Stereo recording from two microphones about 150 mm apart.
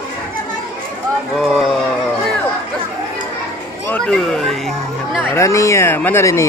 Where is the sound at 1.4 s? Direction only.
Centre (ahead or behind).